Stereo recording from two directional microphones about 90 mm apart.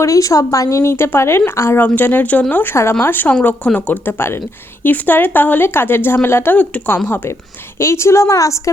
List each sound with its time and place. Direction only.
0.0 s speech: 40° left (ahead or behind); by 7.3 s 20° left (ahead or behind)
7.8 s a woman's voice: 30° left (ahead or behind)